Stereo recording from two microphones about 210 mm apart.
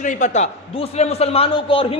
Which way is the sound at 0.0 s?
35° left (ahead or behind).